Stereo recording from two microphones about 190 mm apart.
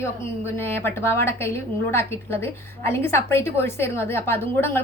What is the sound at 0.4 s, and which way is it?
A woman's voice, 10° left (ahead or behind).